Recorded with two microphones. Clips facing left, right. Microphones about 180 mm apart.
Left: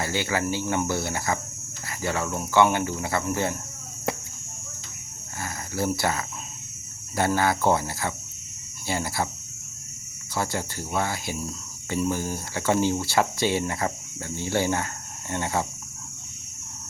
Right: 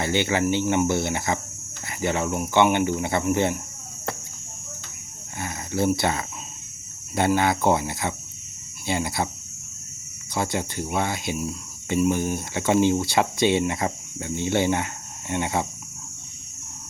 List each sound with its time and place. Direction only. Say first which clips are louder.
0.0 s speech: right 4 dB; 25° right (ahead or behind)
5.4 s speech: right 4 dB; 20° right (ahead or behind)
10.3 s speech: right 3 dB; 20° right (ahead or behind)